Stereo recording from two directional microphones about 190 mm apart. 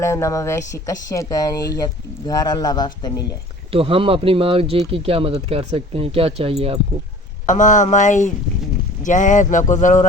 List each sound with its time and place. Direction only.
0.0 s a man's voice: 15° left (ahead or behind)
3.7 s speech: 30° right (ahead or behind)
7.4 s speech: 40° left (ahead or behind)